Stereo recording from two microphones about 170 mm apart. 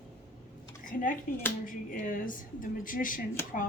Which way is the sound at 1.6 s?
50° left (ahead or behind).